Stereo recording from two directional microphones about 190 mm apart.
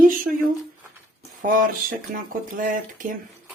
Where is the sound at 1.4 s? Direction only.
50° right (ahead or behind).